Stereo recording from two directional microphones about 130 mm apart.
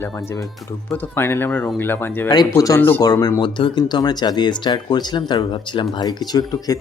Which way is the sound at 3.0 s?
30° left (ahead or behind).